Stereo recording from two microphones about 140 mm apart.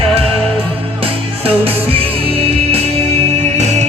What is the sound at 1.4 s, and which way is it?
Music, 45° right (ahead or behind).